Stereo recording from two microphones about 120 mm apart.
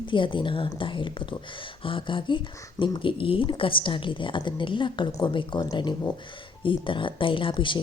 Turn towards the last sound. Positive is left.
turn(degrees=45)  # may be behind; listen again after turning